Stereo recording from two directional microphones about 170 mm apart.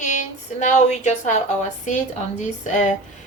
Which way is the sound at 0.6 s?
45° left (ahead or behind).